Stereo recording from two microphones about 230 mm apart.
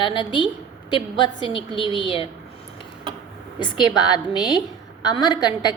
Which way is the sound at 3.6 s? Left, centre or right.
Centre.